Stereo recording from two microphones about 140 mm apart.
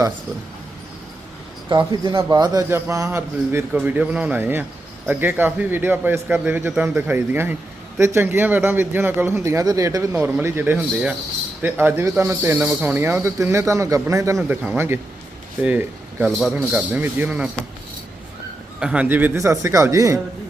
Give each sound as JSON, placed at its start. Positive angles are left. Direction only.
{"t": 1.9, "sound": "a man's voice", "side_deg": -30}
{"t": 18.8, "sound": "a man's voice", "side_deg": -5}